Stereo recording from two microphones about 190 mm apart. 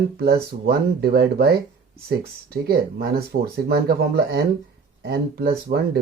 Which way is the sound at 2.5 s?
55° right (ahead or behind).